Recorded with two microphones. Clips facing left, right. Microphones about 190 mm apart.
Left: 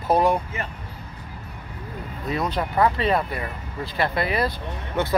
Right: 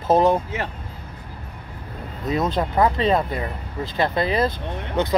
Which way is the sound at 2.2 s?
20° right (ahead or behind).